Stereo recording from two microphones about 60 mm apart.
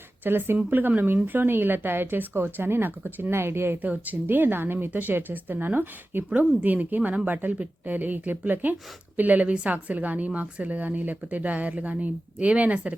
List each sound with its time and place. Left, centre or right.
0.3 s speech: right
3.8 s a woman's voice: right